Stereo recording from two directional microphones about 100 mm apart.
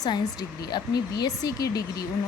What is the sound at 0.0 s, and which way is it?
Speech, 40° left (ahead or behind).